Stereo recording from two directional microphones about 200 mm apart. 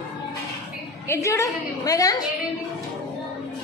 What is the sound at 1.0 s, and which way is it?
A woman's voice, 15° left (ahead or behind).